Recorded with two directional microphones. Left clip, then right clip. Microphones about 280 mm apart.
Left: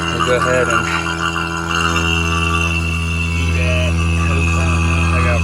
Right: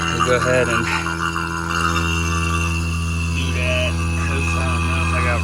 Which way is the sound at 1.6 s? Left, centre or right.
Left.